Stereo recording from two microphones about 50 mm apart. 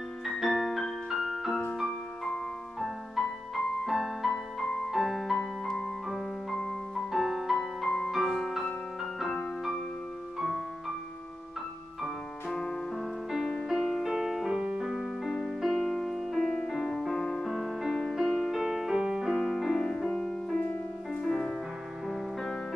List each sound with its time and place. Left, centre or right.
0.2 s music: centre
1.9 s piano: centre
2.8 s music: centre
7.1 s music: centre
12.5 s music: centre
13.3 s music: centre
15.3 s music: centre
19.3 s music: centre
20.6 s music: left
21.2 s music: centre